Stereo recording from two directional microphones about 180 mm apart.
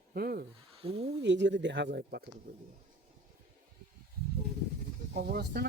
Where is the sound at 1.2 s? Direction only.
80° right; by 2.2 s 60° right (ahead or behind).